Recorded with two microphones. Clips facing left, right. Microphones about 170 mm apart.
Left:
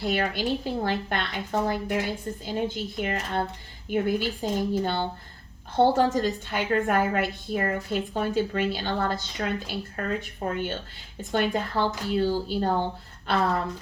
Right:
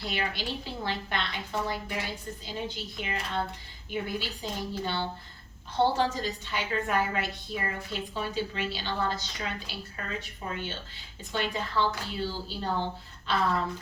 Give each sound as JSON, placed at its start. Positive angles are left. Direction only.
{"t": 0.0, "sound": "a woman's voice", "side_deg": 50}